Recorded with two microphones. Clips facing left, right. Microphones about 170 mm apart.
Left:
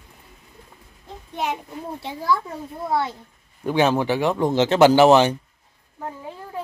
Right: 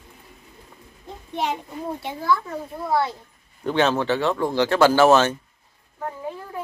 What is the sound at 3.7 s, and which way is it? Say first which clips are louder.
Speech: left 1 dB; 10° left (ahead or behind).